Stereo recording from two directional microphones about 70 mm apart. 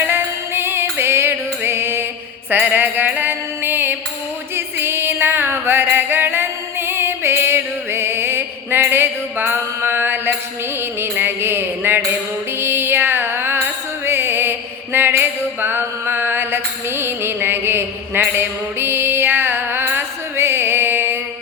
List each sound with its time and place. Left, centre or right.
0.0 s music: right
2.5 s mantra: right
4.5 s music: right
11.0 s mantra: right
12.5 s music: right
14.9 s a sound: right
17.0 s music: right